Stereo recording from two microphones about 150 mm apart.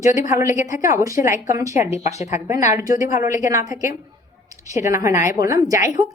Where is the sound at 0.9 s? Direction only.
20° right (ahead or behind).